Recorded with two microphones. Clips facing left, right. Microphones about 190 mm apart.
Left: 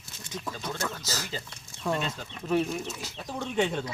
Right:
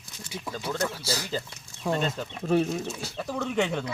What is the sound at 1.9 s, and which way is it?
Speech, 40° right (ahead or behind).